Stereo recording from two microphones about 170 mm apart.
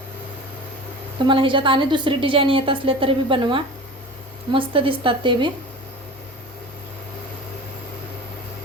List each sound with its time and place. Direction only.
1.3 s a woman's voice: 30° right (ahead or behind)